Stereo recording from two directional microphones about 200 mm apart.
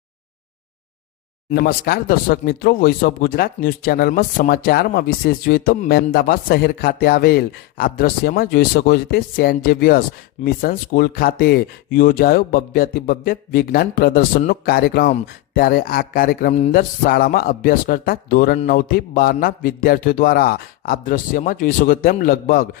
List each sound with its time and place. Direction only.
1.6 s speech: 50° left (ahead or behind)